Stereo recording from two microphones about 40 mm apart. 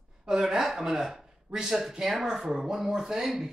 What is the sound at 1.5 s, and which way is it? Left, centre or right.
Speech, centre.